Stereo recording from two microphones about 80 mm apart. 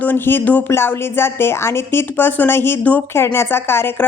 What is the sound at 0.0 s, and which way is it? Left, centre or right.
Speech, left.